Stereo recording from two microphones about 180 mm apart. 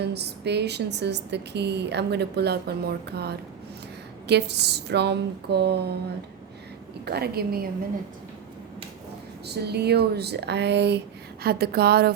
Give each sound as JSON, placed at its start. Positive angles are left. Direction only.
{"t": 0.0, "sound": "a woman's voice", "side_deg": -70}
{"t": 7.0, "sound": "speech", "side_deg": -60}
{"t": 9.5, "sound": "speech", "side_deg": -65}